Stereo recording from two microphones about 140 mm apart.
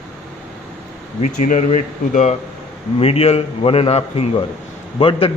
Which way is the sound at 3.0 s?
45° left (ahead or behind).